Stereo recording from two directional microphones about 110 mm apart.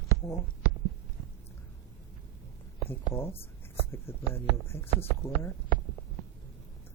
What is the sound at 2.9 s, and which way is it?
Speech, 25° left (ahead or behind).